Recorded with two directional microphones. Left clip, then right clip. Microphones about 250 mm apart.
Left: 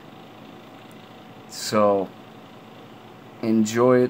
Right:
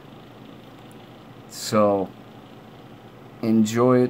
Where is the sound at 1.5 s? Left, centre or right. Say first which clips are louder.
Even; centre.